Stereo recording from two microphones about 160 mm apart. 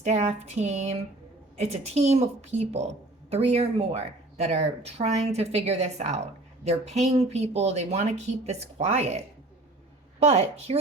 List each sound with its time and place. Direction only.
0.0 s a woman's voice: 45° right (ahead or behind)